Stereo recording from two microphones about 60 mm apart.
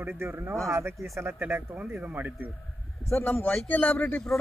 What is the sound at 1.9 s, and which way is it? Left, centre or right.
Speech, right.